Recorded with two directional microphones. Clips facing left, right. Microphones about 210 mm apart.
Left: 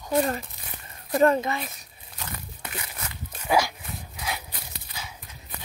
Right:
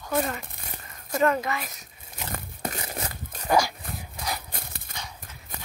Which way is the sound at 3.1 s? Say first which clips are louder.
Right 1 dB; 45° right (ahead or behind).